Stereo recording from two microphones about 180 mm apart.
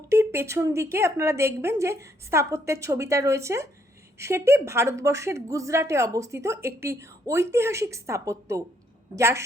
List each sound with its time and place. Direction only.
0.1 s a woman's voice: 15° right (ahead or behind)